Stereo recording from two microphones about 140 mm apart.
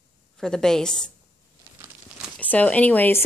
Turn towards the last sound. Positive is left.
turn(degrees=15)  # may be behind; listen again after turning